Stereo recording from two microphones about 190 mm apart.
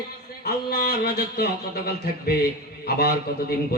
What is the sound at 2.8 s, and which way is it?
Speech, 55° left (ahead or behind).